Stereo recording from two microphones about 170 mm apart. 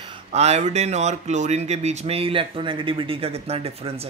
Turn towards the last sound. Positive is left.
turn(degrees=-35)  # may be behind; listen again after turning